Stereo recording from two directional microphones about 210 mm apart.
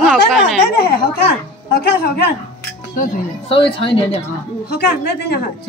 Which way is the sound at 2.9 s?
40° left (ahead or behind).